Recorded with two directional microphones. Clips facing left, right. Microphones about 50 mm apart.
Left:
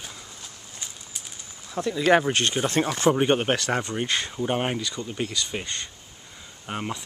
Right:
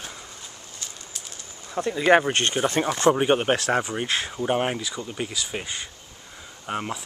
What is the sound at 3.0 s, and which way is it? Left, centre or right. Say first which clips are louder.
Speech: right 2 dB; centre.